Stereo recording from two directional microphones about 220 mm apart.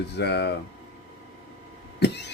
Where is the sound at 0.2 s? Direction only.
50° left (ahead or behind).